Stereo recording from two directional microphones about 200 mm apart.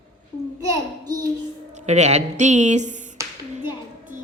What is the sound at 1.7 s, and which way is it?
A woman's voice, 35° right (ahead or behind).